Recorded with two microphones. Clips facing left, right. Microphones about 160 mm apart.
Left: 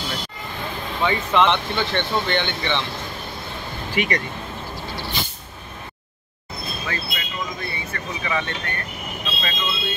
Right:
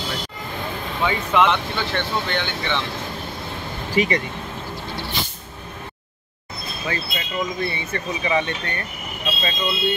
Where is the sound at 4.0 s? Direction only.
35° right (ahead or behind).